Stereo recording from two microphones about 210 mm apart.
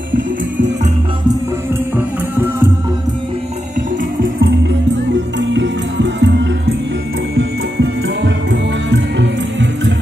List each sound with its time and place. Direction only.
5.4 s music: 60° right (ahead or behind)